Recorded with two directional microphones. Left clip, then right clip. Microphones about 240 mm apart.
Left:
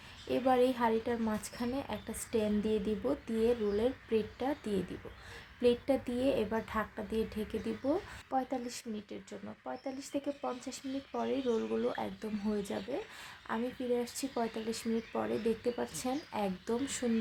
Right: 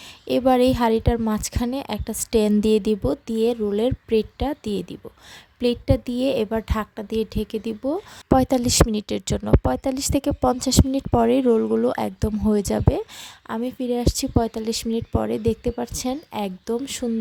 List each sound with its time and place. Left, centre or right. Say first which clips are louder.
0.3 s speech: right 11 dB; right